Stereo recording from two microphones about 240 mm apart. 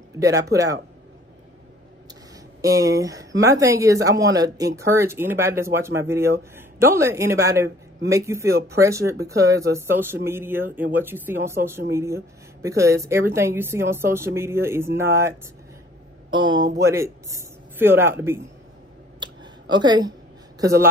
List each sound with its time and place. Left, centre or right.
0.2 s speech: centre
2.6 s speech: centre
16.8 s speech: centre
19.1 s a sound: centre
20.6 s speech: centre